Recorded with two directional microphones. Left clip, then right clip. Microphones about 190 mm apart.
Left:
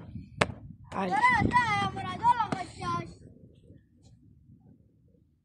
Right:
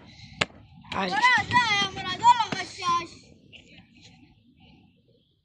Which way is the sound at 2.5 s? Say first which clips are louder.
Right 7 dB; 20° left (ahead or behind).